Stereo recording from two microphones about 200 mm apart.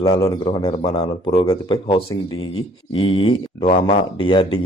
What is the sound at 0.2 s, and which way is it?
Speech, 20° left (ahead or behind).